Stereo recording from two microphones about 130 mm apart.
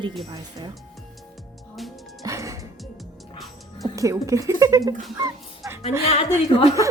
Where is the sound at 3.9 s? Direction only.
25° right (ahead or behind).